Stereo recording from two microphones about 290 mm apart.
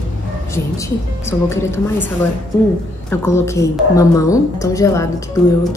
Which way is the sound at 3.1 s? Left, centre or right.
Centre.